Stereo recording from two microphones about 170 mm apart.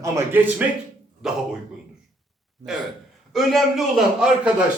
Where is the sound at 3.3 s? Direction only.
Centre (ahead or behind).